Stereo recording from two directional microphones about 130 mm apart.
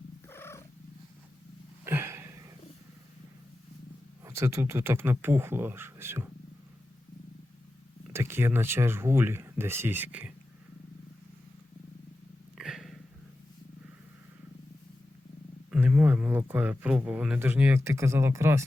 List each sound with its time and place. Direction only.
0.3 s purr: 20° left (ahead or behind)
1.8 s a sound: 15° right (ahead or behind)
4.2 s speech: 20° right (ahead or behind)
8.1 s speech: 20° right (ahead or behind)
12.5 s a sound: centre (ahead or behind)
15.8 s a man's voice: 10° right (ahead or behind)